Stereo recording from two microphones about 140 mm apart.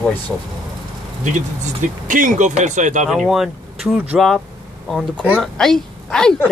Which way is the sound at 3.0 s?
Centre (ahead or behind).